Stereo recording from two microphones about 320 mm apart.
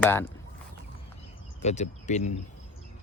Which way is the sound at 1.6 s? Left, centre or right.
Left.